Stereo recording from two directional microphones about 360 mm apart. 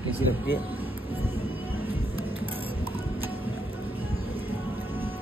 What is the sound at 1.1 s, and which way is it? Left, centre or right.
Music, centre.